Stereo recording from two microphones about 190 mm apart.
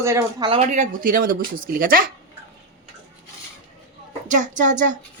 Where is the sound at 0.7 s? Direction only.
40° right (ahead or behind).